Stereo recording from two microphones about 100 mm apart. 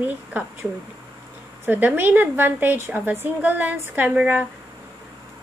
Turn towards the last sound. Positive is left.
turn(degrees=-15)  # may be behind; listen again after turning